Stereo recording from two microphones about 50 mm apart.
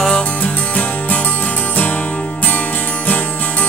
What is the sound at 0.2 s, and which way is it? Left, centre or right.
Music, left.